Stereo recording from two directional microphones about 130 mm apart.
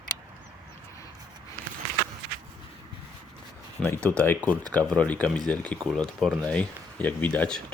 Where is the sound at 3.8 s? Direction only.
10° left (ahead or behind).